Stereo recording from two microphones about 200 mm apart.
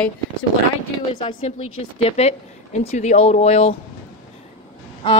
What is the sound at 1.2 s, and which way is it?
A woman's voice, 30° left (ahead or behind).